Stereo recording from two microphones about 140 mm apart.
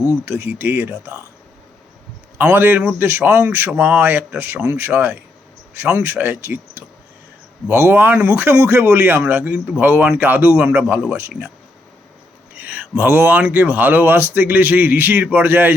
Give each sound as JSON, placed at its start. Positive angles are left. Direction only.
{"t": 0.3, "sound": "speech", "side_deg": -15}
{"t": 2.4, "sound": "speech", "side_deg": -10}
{"t": 12.5, "sound": "speech", "side_deg": -10}